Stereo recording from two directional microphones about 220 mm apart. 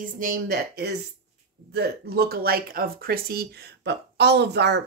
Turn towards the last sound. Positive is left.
turn(degrees=-50)  # may be behind; listen again after turning